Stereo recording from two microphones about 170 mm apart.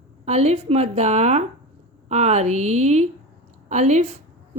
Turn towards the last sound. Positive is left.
turn(degrees=-40)  # may be behind; listen again after turning